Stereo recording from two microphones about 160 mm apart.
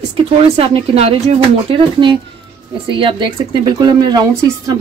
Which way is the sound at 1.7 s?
30° right (ahead or behind).